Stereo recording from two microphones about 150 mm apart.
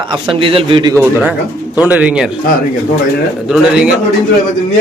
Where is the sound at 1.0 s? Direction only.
15° right (ahead or behind).